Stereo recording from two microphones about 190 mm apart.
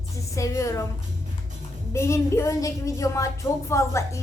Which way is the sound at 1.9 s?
15° left (ahead or behind).